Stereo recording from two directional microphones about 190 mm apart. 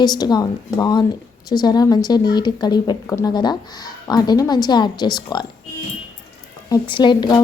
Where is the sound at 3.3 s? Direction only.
25° left (ahead or behind).